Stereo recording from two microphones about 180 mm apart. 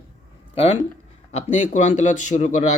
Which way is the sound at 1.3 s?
40° left (ahead or behind).